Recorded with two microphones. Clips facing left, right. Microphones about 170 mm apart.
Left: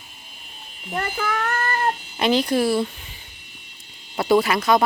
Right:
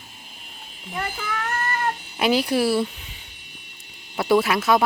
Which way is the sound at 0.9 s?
55° left (ahead or behind).